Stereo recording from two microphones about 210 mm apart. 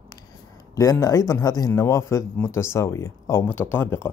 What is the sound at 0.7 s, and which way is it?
Speech, 15° left (ahead or behind).